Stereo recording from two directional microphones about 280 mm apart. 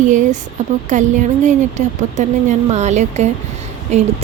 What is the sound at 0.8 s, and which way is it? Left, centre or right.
Speech, right.